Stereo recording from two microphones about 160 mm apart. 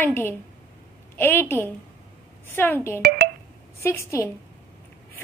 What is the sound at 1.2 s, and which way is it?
A woman's voice, 15° left (ahead or behind).